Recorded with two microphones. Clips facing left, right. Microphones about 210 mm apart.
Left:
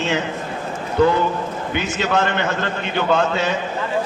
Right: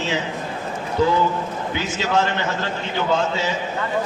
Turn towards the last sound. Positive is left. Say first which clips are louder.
# left 3 dB
turn(degrees=60)  # may be behind; listen again after turning